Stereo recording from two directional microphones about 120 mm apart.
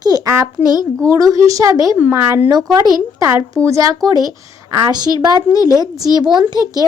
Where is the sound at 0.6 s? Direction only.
35° left (ahead or behind).